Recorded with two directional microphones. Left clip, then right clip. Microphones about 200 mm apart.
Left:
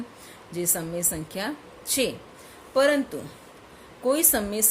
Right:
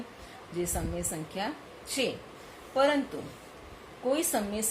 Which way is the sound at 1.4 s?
55° left (ahead or behind).